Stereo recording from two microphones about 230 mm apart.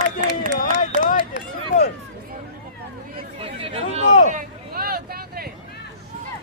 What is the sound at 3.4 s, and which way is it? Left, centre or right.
Chatter, right.